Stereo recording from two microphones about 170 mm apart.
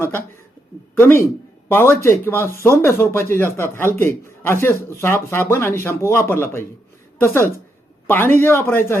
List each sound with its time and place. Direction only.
0.0 s a man's voice: 15° left (ahead or behind)